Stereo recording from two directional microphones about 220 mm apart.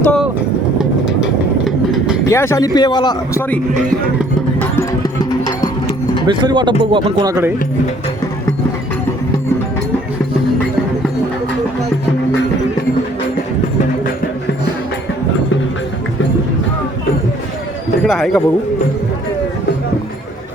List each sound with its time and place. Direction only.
0.0 s vehicle: 5° left (ahead or behind)
2.3 s speech: 10° left (ahead or behind)
6.2 s a man's voice: 20° right (ahead or behind)
18.0 s speech: centre (ahead or behind)